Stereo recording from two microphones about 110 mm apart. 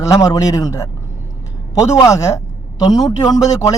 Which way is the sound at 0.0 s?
35° left (ahead or behind).